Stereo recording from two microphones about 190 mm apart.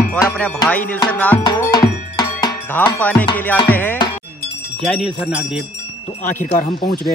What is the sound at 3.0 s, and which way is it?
Music, 5° left (ahead or behind).